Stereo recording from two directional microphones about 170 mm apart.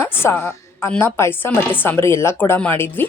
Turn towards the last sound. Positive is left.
turn(degrees=10)  # may be behind; listen again after turning